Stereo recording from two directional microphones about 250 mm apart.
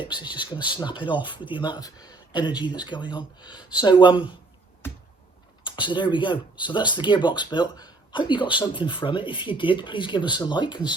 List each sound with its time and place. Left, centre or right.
0.0 s speech: centre
5.6 s speech: centre